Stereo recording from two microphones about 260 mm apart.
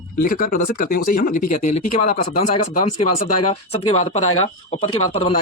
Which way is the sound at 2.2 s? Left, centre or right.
Left.